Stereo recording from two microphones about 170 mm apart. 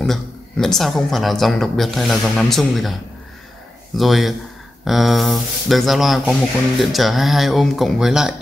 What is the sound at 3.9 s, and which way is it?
Speech, centre (ahead or behind).